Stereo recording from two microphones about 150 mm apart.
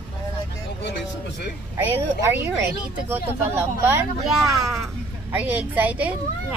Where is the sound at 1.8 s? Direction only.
15° right (ahead or behind).